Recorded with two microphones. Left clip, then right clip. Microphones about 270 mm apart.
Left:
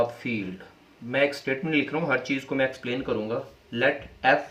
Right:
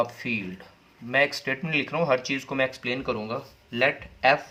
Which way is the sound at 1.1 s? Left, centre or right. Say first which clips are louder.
Right 1 dB; right.